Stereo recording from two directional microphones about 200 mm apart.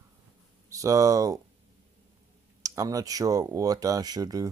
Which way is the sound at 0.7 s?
15° right (ahead or behind).